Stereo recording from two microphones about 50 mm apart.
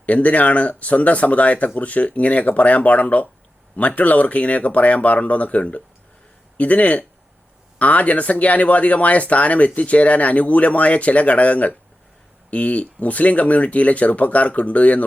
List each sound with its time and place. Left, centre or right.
0.0 s speech: left